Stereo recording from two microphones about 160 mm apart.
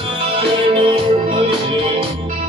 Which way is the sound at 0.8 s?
35° right (ahead or behind).